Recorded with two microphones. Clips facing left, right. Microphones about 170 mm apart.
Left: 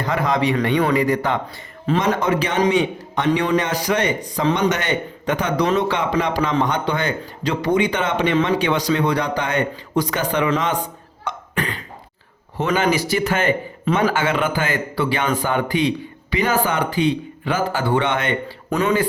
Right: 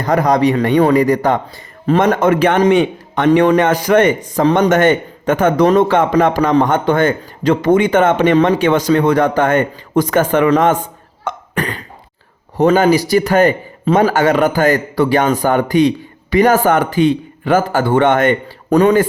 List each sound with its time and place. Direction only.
0.0 s a man's voice: 45° right (ahead or behind)
11.2 s cough: 45° right (ahead or behind)
12.5 s a man's voice: 40° right (ahead or behind)